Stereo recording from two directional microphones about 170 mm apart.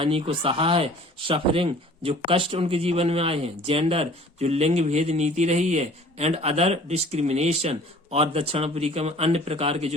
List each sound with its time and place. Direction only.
0.0 s speech: 30° right (ahead or behind)